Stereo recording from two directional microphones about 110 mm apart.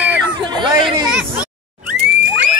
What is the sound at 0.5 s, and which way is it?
Hubbub, 45° right (ahead or behind).